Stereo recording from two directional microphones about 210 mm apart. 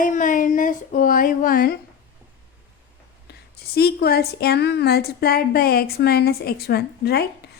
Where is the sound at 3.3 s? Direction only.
50° left (ahead or behind).